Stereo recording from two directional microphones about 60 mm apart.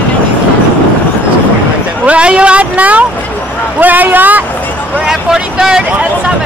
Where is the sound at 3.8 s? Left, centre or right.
Right.